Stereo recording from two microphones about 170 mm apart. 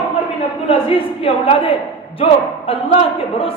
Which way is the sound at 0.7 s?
35° left (ahead or behind).